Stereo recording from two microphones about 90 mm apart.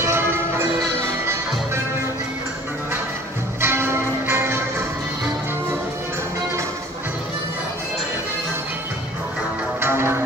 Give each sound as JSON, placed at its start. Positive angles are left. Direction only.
{"t": 0.0, "sound": "music", "side_deg": -25}
{"t": 3.6, "sound": "music", "side_deg": -30}
{"t": 9.8, "sound": "music", "side_deg": -25}